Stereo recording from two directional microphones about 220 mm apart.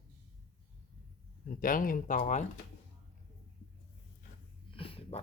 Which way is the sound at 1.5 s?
40° left (ahead or behind).